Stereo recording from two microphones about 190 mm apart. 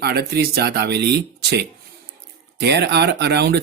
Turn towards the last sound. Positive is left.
turn(degrees=-60)  # may be behind; listen again after turning